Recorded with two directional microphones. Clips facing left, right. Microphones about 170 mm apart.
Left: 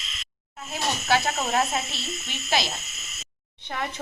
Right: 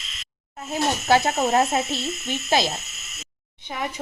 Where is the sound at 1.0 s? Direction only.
45° right (ahead or behind).